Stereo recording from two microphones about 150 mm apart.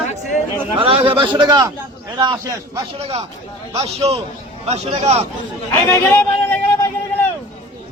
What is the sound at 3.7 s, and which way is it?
A man's voice, 45° right (ahead or behind).